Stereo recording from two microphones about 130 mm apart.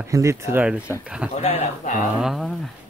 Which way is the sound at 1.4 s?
65° left (ahead or behind).